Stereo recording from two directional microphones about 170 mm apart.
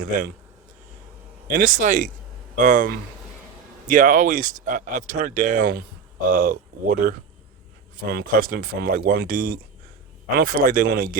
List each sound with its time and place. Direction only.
1.5 s speech: 50° right (ahead or behind)